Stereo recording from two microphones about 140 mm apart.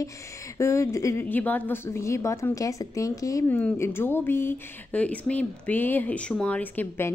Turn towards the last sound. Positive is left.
turn(degrees=15)  # may be behind; listen again after turning